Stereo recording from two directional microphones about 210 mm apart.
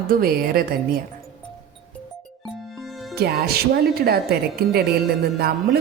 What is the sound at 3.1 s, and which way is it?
A woman's voice, 50° right (ahead or behind).